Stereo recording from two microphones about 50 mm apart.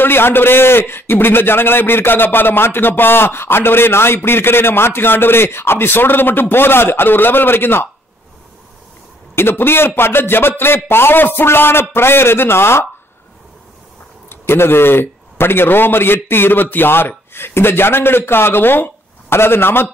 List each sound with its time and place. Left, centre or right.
0.0 s a man's voice: left
9.3 s a man's voice: left
14.3 s a man's voice: left